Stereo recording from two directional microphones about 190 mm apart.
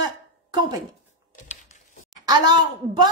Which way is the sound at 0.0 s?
20° right (ahead or behind).